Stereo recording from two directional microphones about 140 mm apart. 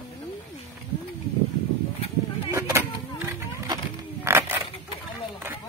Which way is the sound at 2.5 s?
20° right (ahead or behind).